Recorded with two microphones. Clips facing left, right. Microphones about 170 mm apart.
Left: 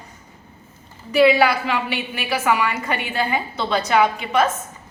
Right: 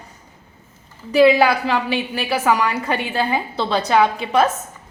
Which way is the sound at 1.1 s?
35° right (ahead or behind).